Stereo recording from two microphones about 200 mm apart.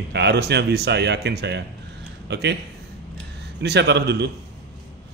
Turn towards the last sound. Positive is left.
turn(degrees=-55)  # may be behind; listen again after turning